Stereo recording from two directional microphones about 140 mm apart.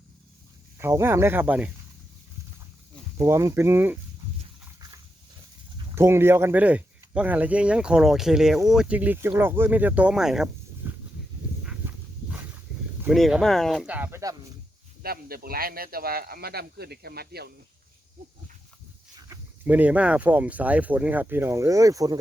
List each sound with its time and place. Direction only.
0.8 s speech: 20° right (ahead or behind)
3.2 s speech: 20° right (ahead or behind)
5.9 s speech: 20° right (ahead or behind)
10.8 s a sound: 15° right (ahead or behind)
11.6 s dog: 10° right (ahead or behind)
13.1 s speech: centre (ahead or behind)
15.0 s speech: 90° right
19.3 s a sound: 25° right (ahead or behind)
19.6 s speech: 10° right (ahead or behind)